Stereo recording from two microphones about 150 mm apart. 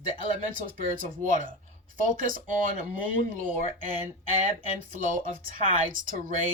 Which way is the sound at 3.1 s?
60° right (ahead or behind).